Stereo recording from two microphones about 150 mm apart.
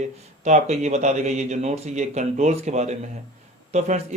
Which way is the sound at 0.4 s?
50° right (ahead or behind).